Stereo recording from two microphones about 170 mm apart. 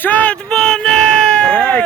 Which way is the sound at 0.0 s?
10° left (ahead or behind).